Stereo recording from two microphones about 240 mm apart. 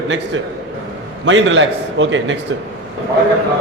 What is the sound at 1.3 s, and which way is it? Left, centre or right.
A man's voice, right.